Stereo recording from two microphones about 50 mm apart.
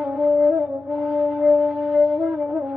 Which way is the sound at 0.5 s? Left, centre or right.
Centre.